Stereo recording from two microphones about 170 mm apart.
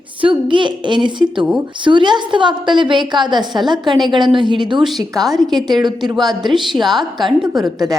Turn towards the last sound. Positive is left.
turn(degrees=-20)  # may be behind; listen again after turning